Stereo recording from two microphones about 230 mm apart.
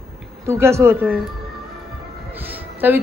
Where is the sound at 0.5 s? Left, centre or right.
Centre.